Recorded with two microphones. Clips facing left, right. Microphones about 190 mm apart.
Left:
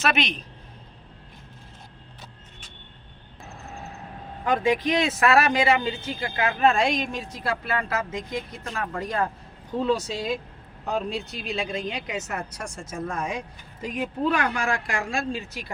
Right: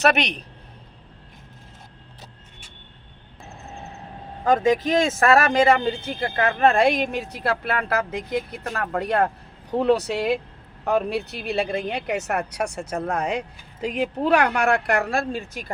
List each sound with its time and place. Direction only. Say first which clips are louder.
4.4 s speech: right 4 dB; 40° right (ahead or behind)